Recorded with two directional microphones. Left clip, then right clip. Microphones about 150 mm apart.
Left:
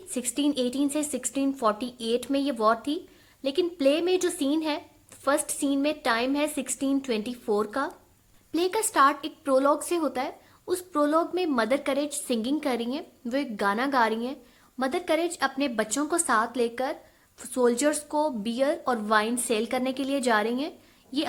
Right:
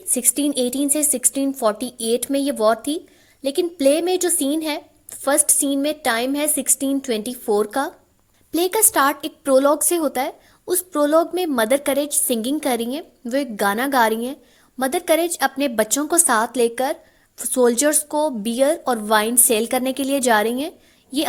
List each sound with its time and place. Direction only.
0.1 s a woman's voice: 40° right (ahead or behind)